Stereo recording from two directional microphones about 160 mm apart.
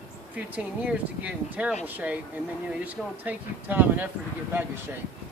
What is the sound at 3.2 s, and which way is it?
Speech, 10° right (ahead or behind).